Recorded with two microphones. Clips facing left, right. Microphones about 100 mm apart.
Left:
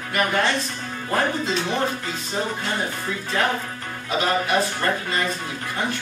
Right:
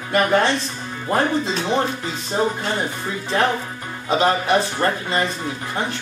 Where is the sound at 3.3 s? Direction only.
25° right (ahead or behind).